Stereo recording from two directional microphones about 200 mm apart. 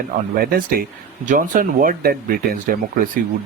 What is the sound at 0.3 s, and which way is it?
Speech, 45° right (ahead or behind).